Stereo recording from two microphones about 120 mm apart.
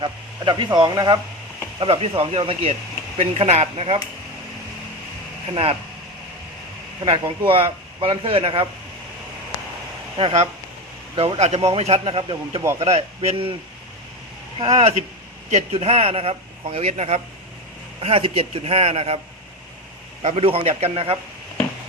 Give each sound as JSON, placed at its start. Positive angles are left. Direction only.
{"t": 0.0, "sound": "speech", "side_deg": -35}
{"t": 1.8, "sound": "a man's voice", "side_deg": -50}
{"t": 7.0, "sound": "a man's voice", "side_deg": -45}
{"t": 10.2, "sound": "a man's voice", "side_deg": -55}
{"t": 11.1, "sound": "speech", "side_deg": -40}
{"t": 11.3, "sound": "a man's voice", "side_deg": -65}
{"t": 14.6, "sound": "a man's voice", "side_deg": -55}
{"t": 20.2, "sound": "a man's voice", "side_deg": -55}